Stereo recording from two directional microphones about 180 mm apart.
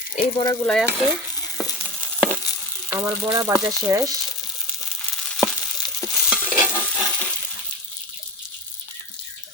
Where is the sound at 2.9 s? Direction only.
15° right (ahead or behind).